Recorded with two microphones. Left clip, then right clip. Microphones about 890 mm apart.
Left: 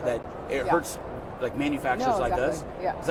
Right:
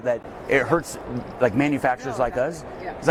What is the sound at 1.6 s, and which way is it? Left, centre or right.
Speech, right.